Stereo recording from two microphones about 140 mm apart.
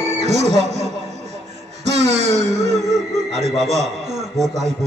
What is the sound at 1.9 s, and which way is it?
Speech, 50° right (ahead or behind).